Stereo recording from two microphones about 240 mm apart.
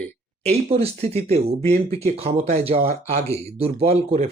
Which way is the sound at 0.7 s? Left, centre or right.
Right.